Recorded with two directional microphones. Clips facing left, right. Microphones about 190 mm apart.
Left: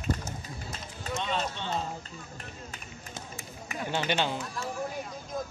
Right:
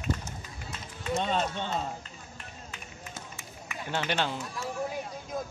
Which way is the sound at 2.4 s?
40° left (ahead or behind).